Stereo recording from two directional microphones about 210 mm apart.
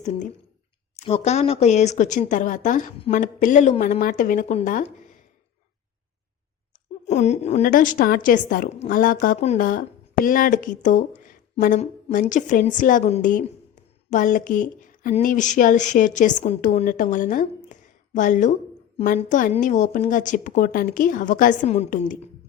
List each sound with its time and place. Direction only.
0.9 s speech: 30° left (ahead or behind)
7.1 s speech: 35° left (ahead or behind)